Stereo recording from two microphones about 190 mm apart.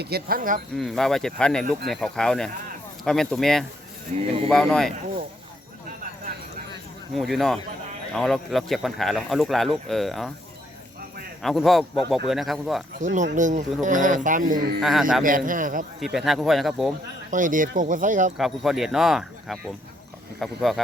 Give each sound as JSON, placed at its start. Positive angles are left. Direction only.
{"t": 0.0, "sound": "speech", "side_deg": -55}
{"t": 0.8, "sound": "speech", "side_deg": 0}
{"t": 4.1, "sound": "speech", "side_deg": -40}
{"t": 4.4, "sound": "speech", "side_deg": 0}
{"t": 6.0, "sound": "a sound", "side_deg": -45}
{"t": 7.1, "sound": "speech", "side_deg": 0}
{"t": 11.4, "sound": "speech", "side_deg": 0}
{"t": 13.0, "sound": "speech", "side_deg": -40}
{"t": 14.8, "sound": "speech", "side_deg": 0}
{"t": 15.2, "sound": "speech", "side_deg": -45}
{"t": 16.0, "sound": "speech", "side_deg": 0}
{"t": 17.3, "sound": "speech", "side_deg": -45}
{"t": 18.3, "sound": "speech", "side_deg": 0}